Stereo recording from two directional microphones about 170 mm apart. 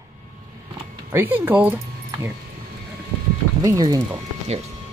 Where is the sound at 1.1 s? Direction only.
10° right (ahead or behind).